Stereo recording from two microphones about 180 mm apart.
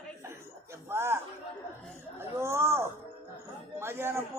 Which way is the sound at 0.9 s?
15° right (ahead or behind).